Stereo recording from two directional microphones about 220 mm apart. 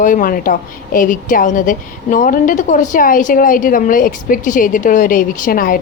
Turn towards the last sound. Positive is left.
turn(degrees=40)  # may be behind; listen again after turning